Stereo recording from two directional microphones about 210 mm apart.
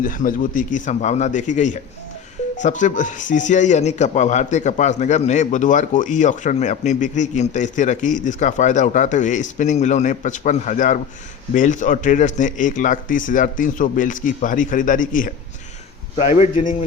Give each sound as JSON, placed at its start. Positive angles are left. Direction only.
{"t": 0.0, "sound": "speech", "side_deg": 40}